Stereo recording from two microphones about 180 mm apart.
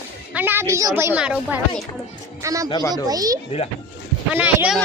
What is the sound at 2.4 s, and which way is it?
Speech, 20° right (ahead or behind).